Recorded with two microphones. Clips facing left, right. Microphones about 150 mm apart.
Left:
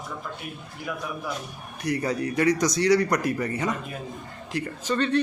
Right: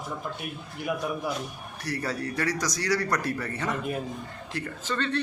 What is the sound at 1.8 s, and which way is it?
Speech, 20° left (ahead or behind).